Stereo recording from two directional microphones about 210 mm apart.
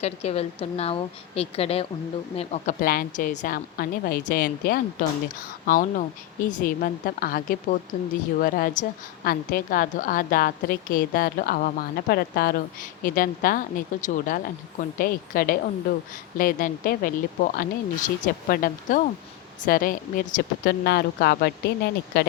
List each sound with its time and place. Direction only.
0.0 s a woman's voice: 30° left (ahead or behind); by 22.3 s 45° left (ahead or behind)